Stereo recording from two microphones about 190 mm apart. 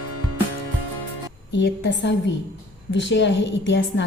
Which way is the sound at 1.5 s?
65° left (ahead or behind).